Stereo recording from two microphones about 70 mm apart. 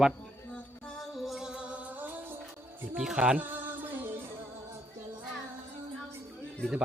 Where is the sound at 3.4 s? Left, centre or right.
Right.